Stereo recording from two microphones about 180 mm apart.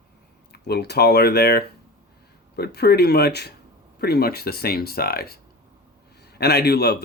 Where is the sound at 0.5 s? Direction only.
60° left (ahead or behind).